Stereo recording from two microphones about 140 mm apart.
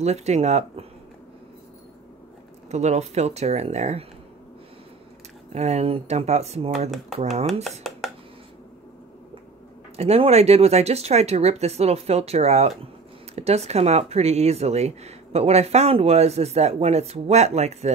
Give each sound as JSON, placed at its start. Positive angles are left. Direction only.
{"t": 0.0, "sound": "speech", "side_deg": -50}
{"t": 2.7, "sound": "speech", "side_deg": -50}
{"t": 5.5, "sound": "speech", "side_deg": -55}
{"t": 7.8, "sound": "a sound", "side_deg": 0}
{"t": 9.9, "sound": "speech", "side_deg": -45}